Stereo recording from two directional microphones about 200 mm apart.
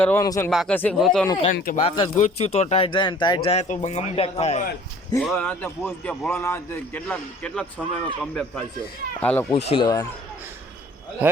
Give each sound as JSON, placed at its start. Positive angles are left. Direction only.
{"t": 0.0, "sound": "a man's voice", "side_deg": 10}
{"t": 0.5, "sound": "a man's voice", "side_deg": 5}
{"t": 1.5, "sound": "speech", "side_deg": 45}
{"t": 1.8, "sound": "speech", "side_deg": 30}
{"t": 5.2, "sound": "a man's voice", "side_deg": 5}
{"t": 9.5, "sound": "speech", "side_deg": 30}
{"t": 11.2, "sound": "a man's voice", "side_deg": -10}